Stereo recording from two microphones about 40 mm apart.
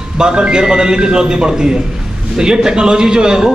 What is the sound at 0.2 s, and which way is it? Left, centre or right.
A man's voice, right.